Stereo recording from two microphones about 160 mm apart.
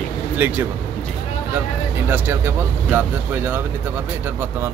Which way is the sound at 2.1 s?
15° right (ahead or behind).